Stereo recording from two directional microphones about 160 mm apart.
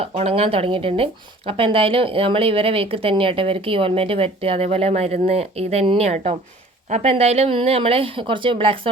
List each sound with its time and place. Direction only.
0.0 s speech: 40° right (ahead or behind)